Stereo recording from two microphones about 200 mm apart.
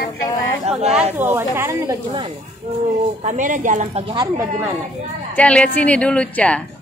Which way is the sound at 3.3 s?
40° right (ahead or behind).